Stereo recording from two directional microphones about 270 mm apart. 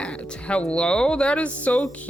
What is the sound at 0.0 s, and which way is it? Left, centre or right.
Speech, centre.